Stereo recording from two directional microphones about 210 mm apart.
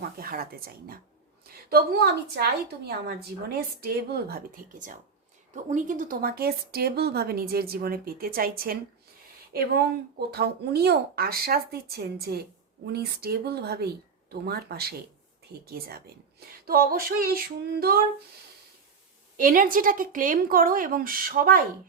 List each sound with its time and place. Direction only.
0.0 s speech: 45° right (ahead or behind)
10.2 s speech: 50° right (ahead or behind)
16.6 s speech: 45° right (ahead or behind)
19.4 s speech: 40° right (ahead or behind)